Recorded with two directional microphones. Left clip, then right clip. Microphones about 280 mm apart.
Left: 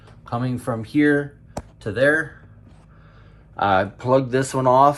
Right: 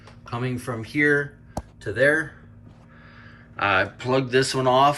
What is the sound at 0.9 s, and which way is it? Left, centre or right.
Speech, centre.